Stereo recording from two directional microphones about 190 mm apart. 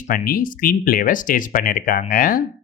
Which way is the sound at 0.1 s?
50° left (ahead or behind).